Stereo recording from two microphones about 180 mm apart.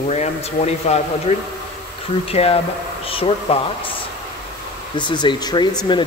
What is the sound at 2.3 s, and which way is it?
Speech, 35° left (ahead or behind).